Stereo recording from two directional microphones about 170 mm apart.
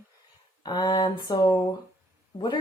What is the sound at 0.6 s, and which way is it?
Speech, 25° left (ahead or behind).